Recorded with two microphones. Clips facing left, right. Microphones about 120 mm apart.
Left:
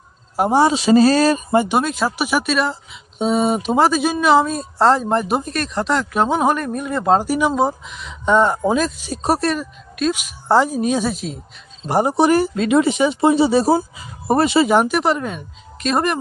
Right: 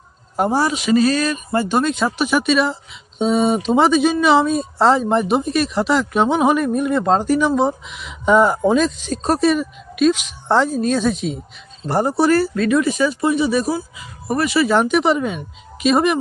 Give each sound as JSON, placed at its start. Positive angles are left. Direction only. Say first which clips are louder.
{"t": 0.5, "sound": "speech", "louder": "left 5 dB", "side_deg": 25}
{"t": 1.5, "sound": "speech", "louder": "right 2 dB", "side_deg": 15}
{"t": 1.9, "sound": "speech", "louder": "right 2 dB", "side_deg": 5}
{"t": 11.8, "sound": "speech", "louder": "left 1 dB", "side_deg": 15}
{"t": 14.7, "sound": "speech", "louder": "left 1 dB", "side_deg": 10}
{"t": 14.9, "sound": "speech", "louder": "right 2 dB", "side_deg": 0}